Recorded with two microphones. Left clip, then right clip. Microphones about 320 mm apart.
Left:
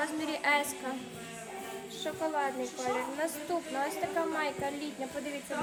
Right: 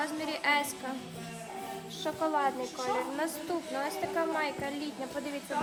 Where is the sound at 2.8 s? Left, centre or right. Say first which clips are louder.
Right 1 dB; centre.